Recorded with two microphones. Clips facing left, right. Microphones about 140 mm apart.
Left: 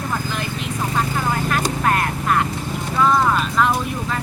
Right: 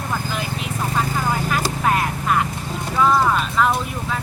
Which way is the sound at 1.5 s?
5° right (ahead or behind).